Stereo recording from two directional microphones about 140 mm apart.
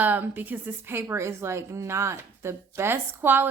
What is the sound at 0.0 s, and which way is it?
A woman's voice, 15° right (ahead or behind).